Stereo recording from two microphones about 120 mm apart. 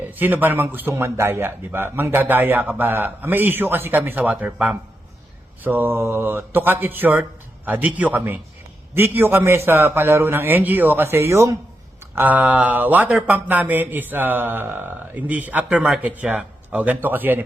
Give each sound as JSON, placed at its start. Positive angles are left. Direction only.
{"t": 0.2, "sound": "speech", "side_deg": -15}